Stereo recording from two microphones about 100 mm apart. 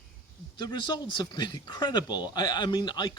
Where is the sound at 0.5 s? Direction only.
50° left (ahead or behind).